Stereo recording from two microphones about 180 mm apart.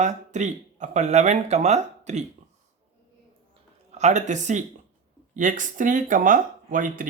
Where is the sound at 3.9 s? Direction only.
40° right (ahead or behind).